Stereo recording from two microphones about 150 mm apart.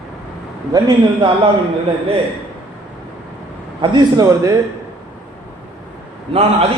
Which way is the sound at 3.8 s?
25° right (ahead or behind).